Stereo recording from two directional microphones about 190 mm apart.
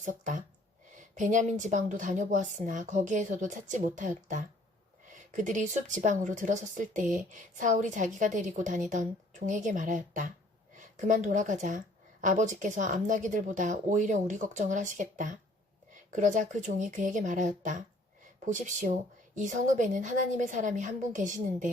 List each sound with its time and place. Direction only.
0.0 s a woman's voice: 40° right (ahead or behind)